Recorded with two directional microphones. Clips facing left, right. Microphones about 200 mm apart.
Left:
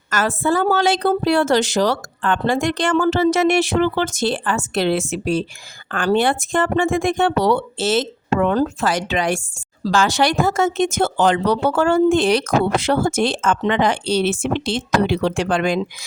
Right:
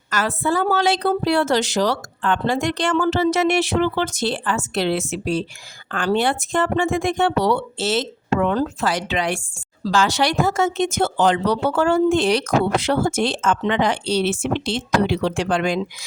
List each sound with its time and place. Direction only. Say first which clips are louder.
0.1 s speech: left 2 dB; 45° left (ahead or behind)